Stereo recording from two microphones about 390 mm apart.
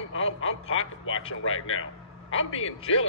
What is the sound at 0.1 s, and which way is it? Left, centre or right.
A man's voice, left.